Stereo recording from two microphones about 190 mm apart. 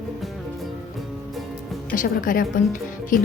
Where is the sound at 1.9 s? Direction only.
45° left (ahead or behind).